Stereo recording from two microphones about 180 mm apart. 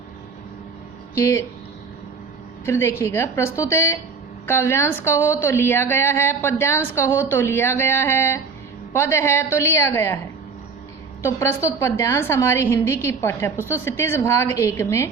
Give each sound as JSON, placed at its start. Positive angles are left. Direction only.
{"t": 1.1, "sound": "a woman's voice", "side_deg": 15}
{"t": 2.6, "sound": "a woman's voice", "side_deg": 15}
{"t": 11.2, "sound": "a woman's voice", "side_deg": 15}